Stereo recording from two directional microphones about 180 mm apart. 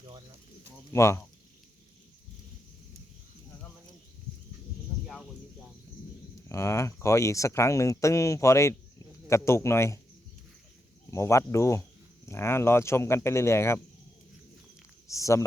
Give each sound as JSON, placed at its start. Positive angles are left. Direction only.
{"t": 0.9, "sound": "speech", "side_deg": 15}
{"t": 5.0, "sound": "a sound", "side_deg": 0}
{"t": 6.5, "sound": "speech", "side_deg": 15}
{"t": 11.1, "sound": "speech", "side_deg": 15}
{"t": 15.0, "sound": "speech", "side_deg": 15}